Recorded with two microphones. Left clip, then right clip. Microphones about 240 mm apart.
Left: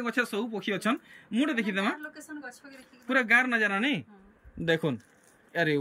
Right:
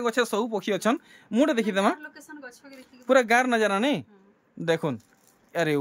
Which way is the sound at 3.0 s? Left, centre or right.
Centre.